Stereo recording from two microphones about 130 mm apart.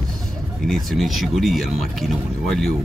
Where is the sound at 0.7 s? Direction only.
Centre (ahead or behind).